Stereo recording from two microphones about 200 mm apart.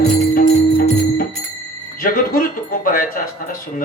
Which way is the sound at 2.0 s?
45° left (ahead or behind).